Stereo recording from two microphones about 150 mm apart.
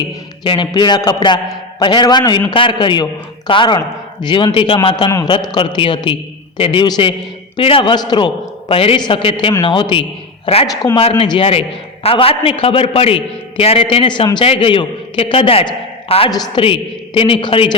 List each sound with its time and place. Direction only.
0.4 s a man's voice: 30° left (ahead or behind)
5.0 s a man's voice: 20° left (ahead or behind)